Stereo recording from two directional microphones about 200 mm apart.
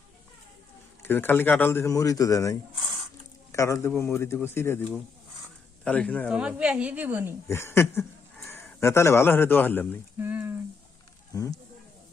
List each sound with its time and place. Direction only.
1.0 s a man's voice: 10° left (ahead or behind)
6.3 s a woman's voice: 5° right (ahead or behind)
7.4 s speech: 10° left (ahead or behind)
10.2 s a sound: 10° right (ahead or behind)
11.3 s speech: 20° left (ahead or behind)